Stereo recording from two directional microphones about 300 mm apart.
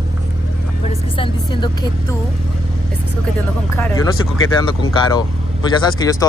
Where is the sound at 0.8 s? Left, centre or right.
Centre.